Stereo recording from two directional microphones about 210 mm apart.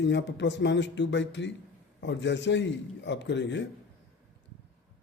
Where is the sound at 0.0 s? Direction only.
55° left (ahead or behind).